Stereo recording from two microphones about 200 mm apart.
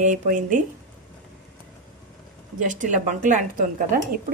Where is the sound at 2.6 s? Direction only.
40° right (ahead or behind).